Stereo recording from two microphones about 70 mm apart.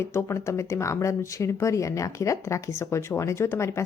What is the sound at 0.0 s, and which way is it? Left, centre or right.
A woman's voice, left.